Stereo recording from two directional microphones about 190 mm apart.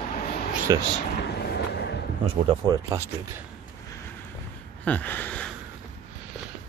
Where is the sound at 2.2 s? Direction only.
25° right (ahead or behind).